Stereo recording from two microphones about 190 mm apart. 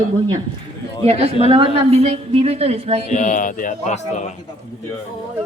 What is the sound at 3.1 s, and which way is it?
A man's voice, 40° left (ahead or behind).